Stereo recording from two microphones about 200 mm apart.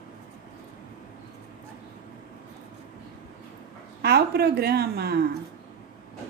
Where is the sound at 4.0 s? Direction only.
55° right (ahead or behind).